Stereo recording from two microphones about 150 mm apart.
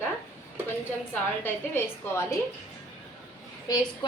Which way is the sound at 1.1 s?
15° left (ahead or behind).